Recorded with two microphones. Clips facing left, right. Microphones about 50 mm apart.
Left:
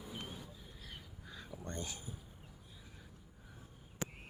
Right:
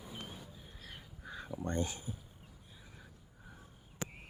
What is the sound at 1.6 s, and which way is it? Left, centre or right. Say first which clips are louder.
Speech: right 8 dB; right.